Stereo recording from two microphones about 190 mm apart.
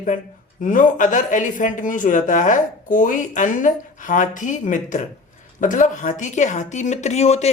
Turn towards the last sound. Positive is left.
turn(degrees=35)  # may be behind; listen again after turning